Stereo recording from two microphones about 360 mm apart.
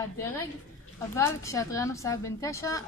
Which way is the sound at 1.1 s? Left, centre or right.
Centre.